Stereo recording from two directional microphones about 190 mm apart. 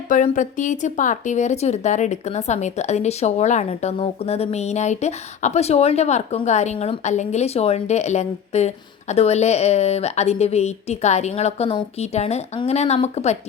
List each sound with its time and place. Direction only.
0.1 s speech: 40° left (ahead or behind)